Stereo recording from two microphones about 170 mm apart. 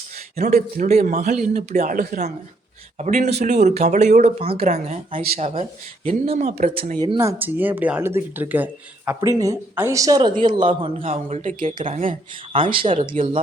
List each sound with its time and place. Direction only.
0.3 s speech: 45° right (ahead or behind)
7.0 s speech: 20° right (ahead or behind)